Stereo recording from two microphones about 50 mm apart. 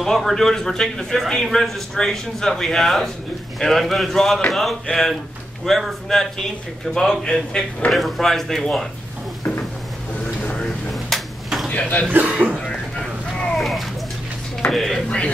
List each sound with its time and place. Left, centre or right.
0.0 s a man's voice: centre
6.0 s a man's voice: centre
10.9 s a sound: centre
11.7 s speech: left
12.3 s speech: right
12.5 s a sound: centre
13.6 s a sound: centre
14.7 s a man's voice: centre
15.0 s speech: left